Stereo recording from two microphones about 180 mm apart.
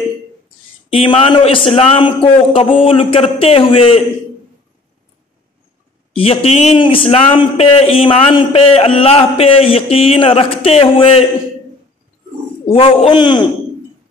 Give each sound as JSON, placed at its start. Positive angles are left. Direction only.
{"t": 0.9, "sound": "speech", "side_deg": 30}
{"t": 6.1, "sound": "speech", "side_deg": 30}
{"t": 12.7, "sound": "speech", "side_deg": 30}